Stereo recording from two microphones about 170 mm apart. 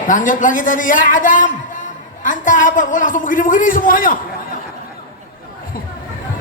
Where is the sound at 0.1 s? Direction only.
50° left (ahead or behind).